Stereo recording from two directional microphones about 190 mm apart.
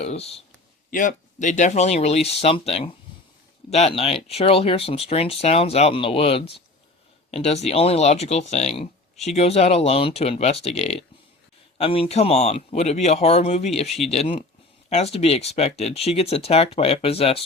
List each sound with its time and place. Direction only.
0.0 s speech: 35° left (ahead or behind)
0.9 s speech: 45° left (ahead or behind)